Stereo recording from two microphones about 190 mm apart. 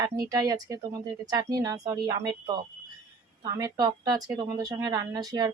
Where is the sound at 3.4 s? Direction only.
20° right (ahead or behind).